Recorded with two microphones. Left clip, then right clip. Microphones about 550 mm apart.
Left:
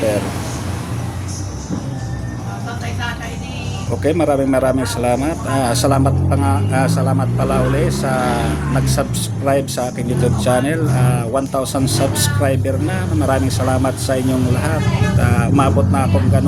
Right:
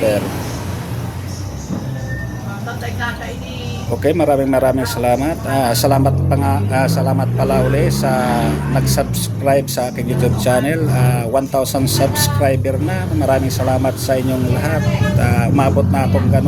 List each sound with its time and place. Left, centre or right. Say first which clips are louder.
4.0 s speech: right 1 dB; right
15.2 s speech: even; right